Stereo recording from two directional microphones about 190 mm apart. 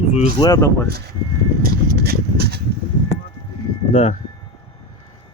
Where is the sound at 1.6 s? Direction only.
55° right (ahead or behind).